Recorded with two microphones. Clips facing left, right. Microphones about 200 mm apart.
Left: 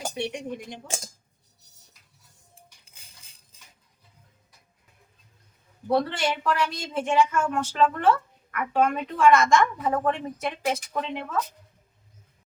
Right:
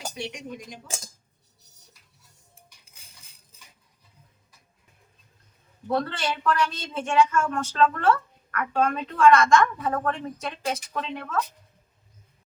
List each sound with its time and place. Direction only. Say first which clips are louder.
0.3 s speech: left 4 dB; 30° left (ahead or behind)
5.9 s speech: left 3 dB; 15° left (ahead or behind)